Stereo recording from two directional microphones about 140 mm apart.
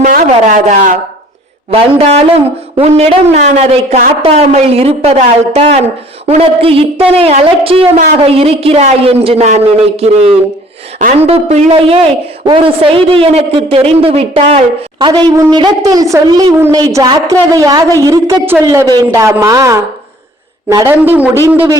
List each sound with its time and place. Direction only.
0.0 s speech: 75° right (ahead or behind)
1.7 s a woman's voice: 50° right (ahead or behind); by 20.9 s 25° right (ahead or behind)
21.0 s speech: 15° right (ahead or behind)